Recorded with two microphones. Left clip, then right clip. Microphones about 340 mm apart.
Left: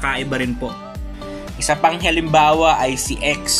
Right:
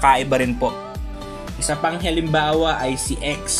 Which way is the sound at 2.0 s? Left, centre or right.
Left.